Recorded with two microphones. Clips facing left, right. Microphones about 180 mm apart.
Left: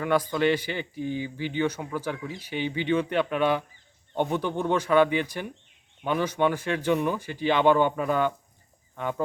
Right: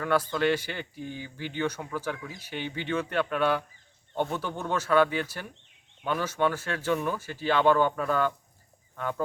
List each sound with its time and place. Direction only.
0.0 s speech: 10° left (ahead or behind)